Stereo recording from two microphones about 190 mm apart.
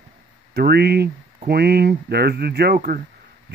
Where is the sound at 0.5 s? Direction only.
55° right (ahead or behind).